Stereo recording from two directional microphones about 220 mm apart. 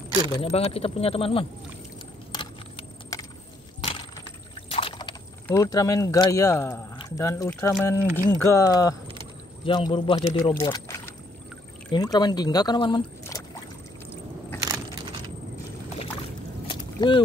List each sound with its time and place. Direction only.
0.4 s speech: 25° left (ahead or behind)
4.6 s boat: 25° left (ahead or behind)
5.5 s speech: 15° left (ahead or behind)
14.6 s keys jangling: 15° right (ahead or behind)
16.6 s boat: 20° left (ahead or behind)